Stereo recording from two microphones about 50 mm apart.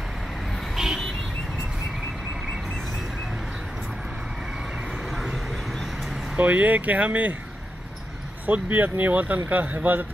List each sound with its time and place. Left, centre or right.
0.7 s vehicle: centre
4.9 s vehicle: centre
6.3 s speech: right
8.5 s speech: right